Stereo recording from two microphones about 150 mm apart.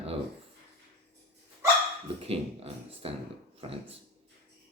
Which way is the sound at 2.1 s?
40° right (ahead or behind).